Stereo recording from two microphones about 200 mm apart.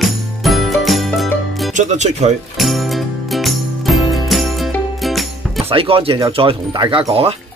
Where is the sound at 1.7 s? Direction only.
35° right (ahead or behind).